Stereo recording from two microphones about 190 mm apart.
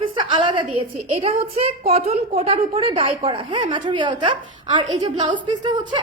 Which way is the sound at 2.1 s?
30° right (ahead or behind).